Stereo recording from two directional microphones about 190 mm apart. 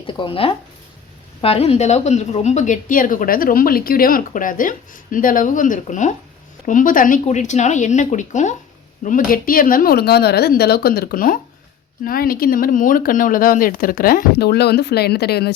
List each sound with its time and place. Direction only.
0.1 s speech: 25° left (ahead or behind); by 15.5 s 60° left (ahead or behind)